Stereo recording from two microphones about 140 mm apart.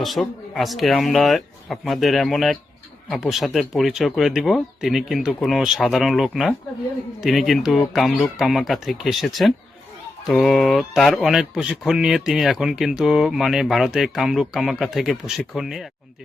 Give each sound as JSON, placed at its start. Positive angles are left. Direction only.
{"t": 0.0, "sound": "speech", "side_deg": 0}